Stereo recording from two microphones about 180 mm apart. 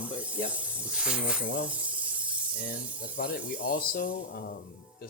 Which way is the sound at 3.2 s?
55° left (ahead or behind).